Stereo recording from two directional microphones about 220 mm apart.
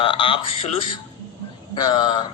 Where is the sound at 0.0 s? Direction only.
25° left (ahead or behind).